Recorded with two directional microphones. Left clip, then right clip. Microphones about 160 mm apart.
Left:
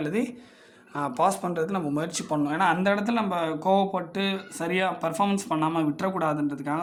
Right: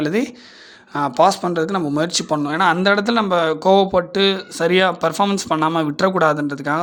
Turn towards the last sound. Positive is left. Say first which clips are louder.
# right 8 dB
turn(degrees=-35)  # may be behind; listen again after turning